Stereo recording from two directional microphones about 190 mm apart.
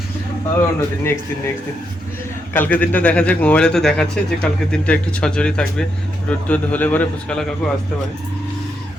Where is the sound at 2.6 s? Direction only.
10° left (ahead or behind).